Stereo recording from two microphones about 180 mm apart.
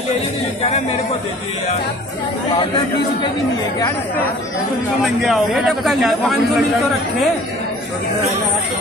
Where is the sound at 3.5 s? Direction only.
20° left (ahead or behind).